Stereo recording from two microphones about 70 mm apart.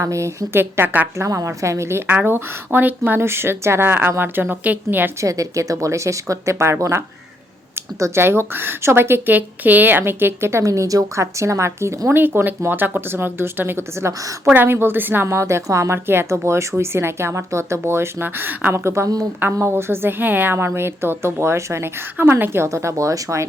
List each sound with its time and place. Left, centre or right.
0.0 s a woman's voice: right
0.5 s a woman's voice: right
1.2 s a woman's voice: right
2.0 s a woman's voice: right
5.2 s a woman's voice: right
8.2 s a woman's voice: right
12.0 s a woman's voice: right
15.3 s a woman's voice: right
16.0 s a woman's voice: right
18.7 s a woman's voice: right
19.4 s a woman's voice: right